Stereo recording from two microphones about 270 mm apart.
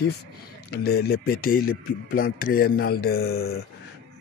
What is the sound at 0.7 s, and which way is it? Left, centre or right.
Speech, left.